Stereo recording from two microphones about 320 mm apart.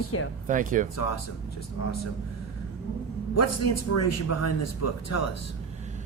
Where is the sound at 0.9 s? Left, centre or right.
Left.